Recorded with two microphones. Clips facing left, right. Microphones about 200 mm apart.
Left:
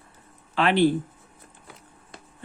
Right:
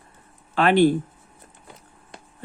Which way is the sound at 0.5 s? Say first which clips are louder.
Right 4 dB; 50° right (ahead or behind).